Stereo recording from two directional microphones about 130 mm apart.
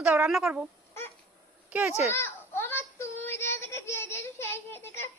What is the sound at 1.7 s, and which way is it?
Speech, 10° right (ahead or behind).